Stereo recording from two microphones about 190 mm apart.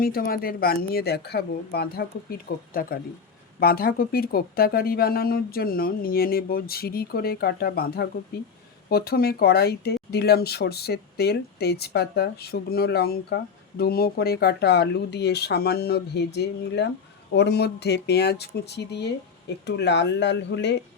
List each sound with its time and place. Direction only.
0.0 s speech: 50° left (ahead or behind); by 20.7 s 65° left (ahead or behind)